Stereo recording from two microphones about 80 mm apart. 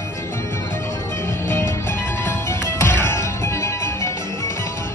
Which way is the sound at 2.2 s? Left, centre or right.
Left.